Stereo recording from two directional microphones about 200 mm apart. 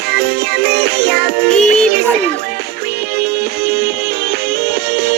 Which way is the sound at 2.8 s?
55° right (ahead or behind).